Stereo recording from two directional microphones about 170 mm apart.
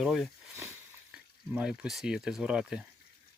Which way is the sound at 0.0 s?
Centre (ahead or behind).